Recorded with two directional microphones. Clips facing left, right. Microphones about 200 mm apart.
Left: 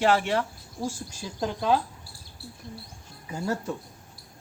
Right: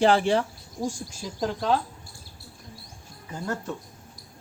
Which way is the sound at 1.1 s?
Centre (ahead or behind).